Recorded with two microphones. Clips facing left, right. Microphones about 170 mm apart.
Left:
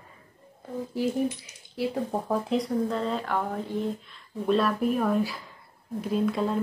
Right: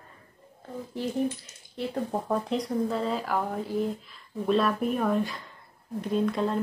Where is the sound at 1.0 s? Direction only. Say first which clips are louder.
Left 2 dB; 5° left (ahead or behind).